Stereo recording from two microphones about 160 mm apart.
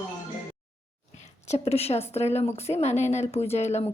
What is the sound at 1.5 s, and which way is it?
Speech, 40° left (ahead or behind).